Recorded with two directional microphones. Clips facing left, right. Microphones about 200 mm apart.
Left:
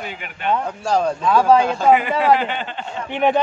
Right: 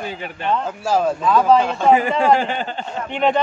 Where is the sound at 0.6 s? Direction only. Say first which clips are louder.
Right 2 dB; 5° right (ahead or behind).